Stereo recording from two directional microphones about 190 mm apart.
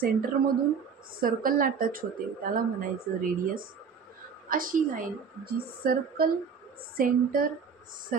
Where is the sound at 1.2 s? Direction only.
50° right (ahead or behind).